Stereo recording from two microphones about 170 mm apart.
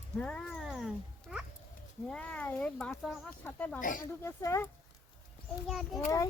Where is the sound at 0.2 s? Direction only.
5° left (ahead or behind).